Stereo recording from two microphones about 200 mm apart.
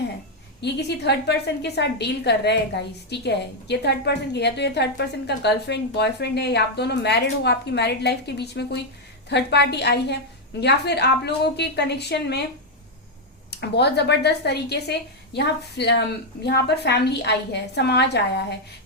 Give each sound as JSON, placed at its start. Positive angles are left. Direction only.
{"t": 0.6, "sound": "a woman's voice", "side_deg": 55}
{"t": 13.5, "sound": "a woman's voice", "side_deg": 55}